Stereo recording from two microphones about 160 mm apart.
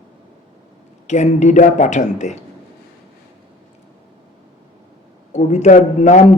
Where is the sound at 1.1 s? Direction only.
45° left (ahead or behind).